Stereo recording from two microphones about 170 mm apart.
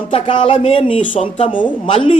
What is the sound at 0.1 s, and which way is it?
Speech, 30° left (ahead or behind).